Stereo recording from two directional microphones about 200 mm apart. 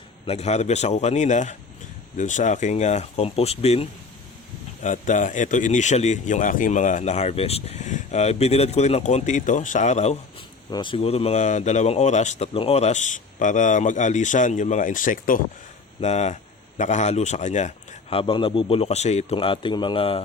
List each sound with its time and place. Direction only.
0.3 s speech: 35° left (ahead or behind)
10.7 s speech: 25° left (ahead or behind)